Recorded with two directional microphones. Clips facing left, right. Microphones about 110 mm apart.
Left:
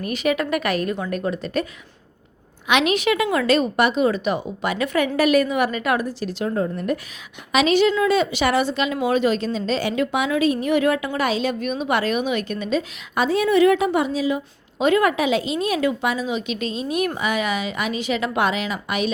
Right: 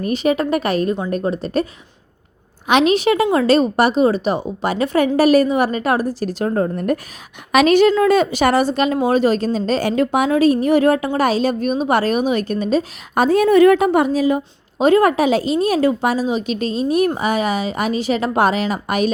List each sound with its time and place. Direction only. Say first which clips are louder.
0.0 s a woman's voice: right 4 dB; 30° right (ahead or behind)
2.6 s a woman's voice: right 5 dB; 35° right (ahead or behind)